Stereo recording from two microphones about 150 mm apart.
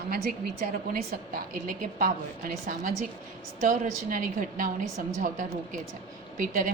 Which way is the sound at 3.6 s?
65° right (ahead or behind).